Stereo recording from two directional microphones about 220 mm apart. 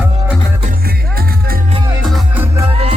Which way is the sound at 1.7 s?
20° right (ahead or behind).